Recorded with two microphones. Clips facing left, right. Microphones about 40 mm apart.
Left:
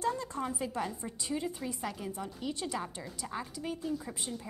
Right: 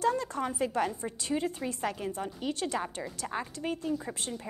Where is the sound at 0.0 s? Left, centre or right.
Right.